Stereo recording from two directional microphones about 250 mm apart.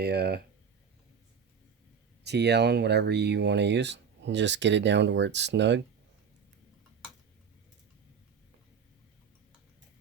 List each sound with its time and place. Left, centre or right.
0.0 s speech: right
2.2 s speech: right